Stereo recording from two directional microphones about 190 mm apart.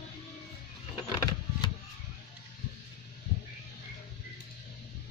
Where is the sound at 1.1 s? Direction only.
20° left (ahead or behind).